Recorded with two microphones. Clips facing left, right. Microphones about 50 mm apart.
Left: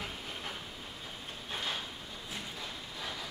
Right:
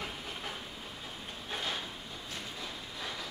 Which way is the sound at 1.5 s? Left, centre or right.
Centre.